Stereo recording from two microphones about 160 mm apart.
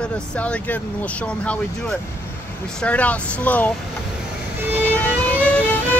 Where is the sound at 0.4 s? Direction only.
10° left (ahead or behind).